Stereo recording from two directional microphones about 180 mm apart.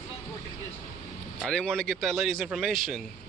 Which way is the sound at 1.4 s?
5° left (ahead or behind).